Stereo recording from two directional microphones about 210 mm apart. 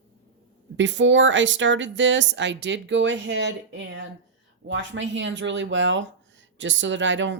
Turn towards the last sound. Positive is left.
turn(degrees=-60)  # may be behind; listen again after turning